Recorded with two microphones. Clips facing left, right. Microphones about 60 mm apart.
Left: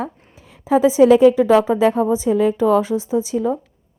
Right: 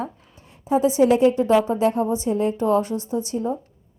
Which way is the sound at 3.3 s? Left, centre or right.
Left.